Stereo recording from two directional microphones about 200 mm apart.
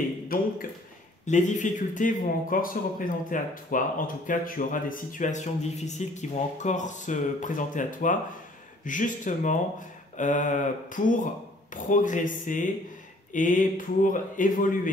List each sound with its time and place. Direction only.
1.2 s speech: 35° left (ahead or behind)